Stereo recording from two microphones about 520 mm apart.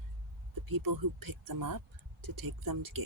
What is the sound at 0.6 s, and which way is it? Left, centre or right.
Speech, right.